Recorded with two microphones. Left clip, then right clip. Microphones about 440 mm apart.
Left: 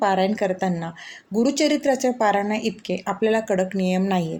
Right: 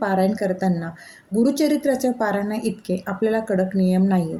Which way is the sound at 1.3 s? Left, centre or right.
Right.